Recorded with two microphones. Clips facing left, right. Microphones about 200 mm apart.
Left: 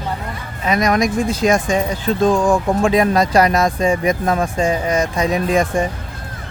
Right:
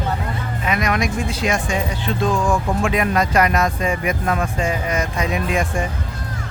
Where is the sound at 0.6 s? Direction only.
40° left (ahead or behind).